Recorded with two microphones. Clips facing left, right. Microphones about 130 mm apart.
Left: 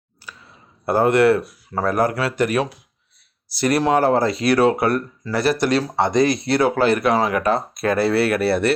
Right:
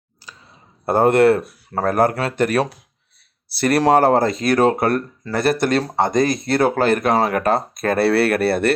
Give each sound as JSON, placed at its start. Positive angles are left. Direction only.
{"t": 0.9, "sound": "speech", "side_deg": -50}
{"t": 2.4, "sound": "speech", "side_deg": -40}
{"t": 3.6, "sound": "speech", "side_deg": -60}